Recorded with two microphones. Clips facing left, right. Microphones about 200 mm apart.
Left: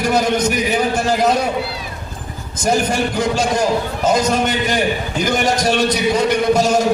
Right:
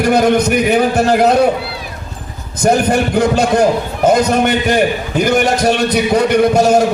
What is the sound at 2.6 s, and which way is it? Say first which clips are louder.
A man's voice: right 5 dB; 60° right (ahead or behind).